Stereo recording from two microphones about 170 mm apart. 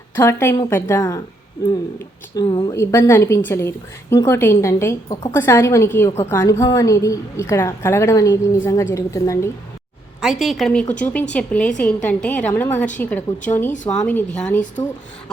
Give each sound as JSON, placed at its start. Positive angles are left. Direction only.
{"t": 0.2, "sound": "a woman's voice", "side_deg": 15}
{"t": 2.3, "sound": "a woman's voice", "side_deg": 25}
{"t": 10.2, "sound": "a woman's voice", "side_deg": 0}